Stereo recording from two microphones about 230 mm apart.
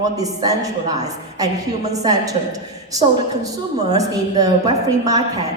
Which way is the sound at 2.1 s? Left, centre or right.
Centre.